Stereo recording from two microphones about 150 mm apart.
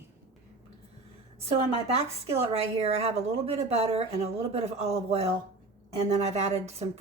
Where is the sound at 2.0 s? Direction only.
45° right (ahead or behind).